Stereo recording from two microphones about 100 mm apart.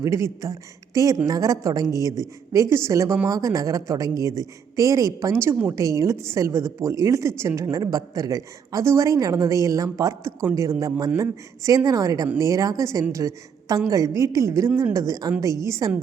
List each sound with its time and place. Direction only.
0.0 s a woman's voice: 30° right (ahead or behind)